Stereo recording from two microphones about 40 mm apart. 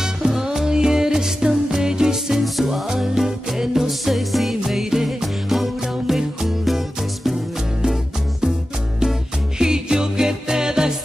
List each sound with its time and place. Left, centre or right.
0.0 s music: centre
2.3 s music: centre
7.8 s music: centre
9.6 s music: centre